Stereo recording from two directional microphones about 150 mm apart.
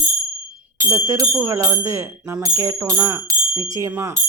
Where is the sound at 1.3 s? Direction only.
15° right (ahead or behind).